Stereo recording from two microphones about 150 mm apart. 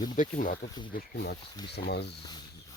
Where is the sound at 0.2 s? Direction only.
60° left (ahead or behind).